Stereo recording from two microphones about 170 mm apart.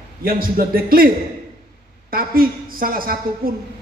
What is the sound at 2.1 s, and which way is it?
A man's voice, 55° right (ahead or behind).